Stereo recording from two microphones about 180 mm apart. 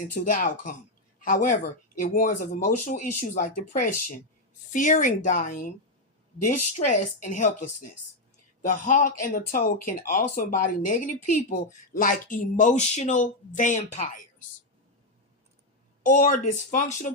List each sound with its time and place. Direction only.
0.1 s speech: 50° left (ahead or behind)
6.7 s a woman's voice: 40° left (ahead or behind)
16.0 s speech: 45° left (ahead or behind)